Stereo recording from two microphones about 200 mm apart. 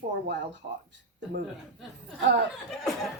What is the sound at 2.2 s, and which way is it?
Speech, 60° right (ahead or behind).